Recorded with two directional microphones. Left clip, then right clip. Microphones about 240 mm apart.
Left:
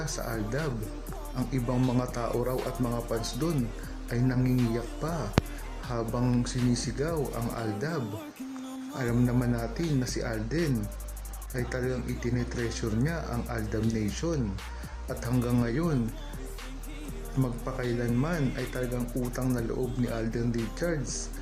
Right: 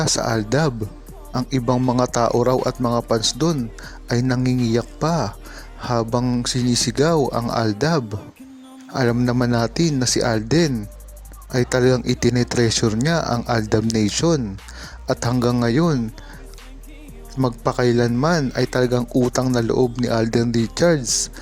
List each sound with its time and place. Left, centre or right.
0.0 s a man's voice: right
17.4 s a man's voice: right